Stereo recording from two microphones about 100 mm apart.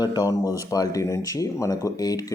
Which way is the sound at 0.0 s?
45° left (ahead or behind).